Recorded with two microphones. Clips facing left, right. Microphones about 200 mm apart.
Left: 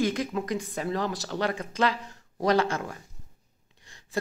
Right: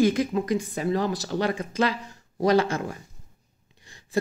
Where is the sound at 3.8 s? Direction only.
10° right (ahead or behind).